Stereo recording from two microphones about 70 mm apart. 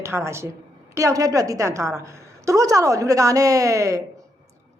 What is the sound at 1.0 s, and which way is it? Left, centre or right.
A woman's voice, right.